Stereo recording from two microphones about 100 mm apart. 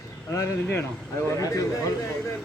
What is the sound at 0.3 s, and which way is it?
Speech, 30° left (ahead or behind).